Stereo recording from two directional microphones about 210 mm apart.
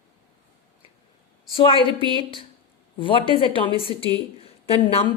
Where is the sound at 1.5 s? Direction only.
25° left (ahead or behind).